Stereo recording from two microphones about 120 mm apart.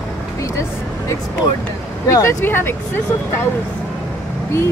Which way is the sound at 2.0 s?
25° left (ahead or behind).